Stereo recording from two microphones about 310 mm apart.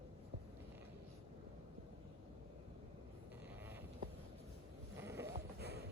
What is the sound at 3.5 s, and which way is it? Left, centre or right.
Sheep, centre.